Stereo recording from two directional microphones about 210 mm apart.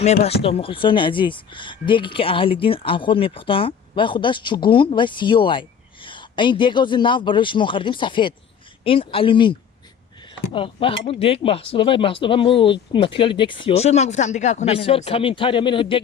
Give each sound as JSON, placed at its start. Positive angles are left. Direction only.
{"t": 0.0, "sound": "speech", "side_deg": 30}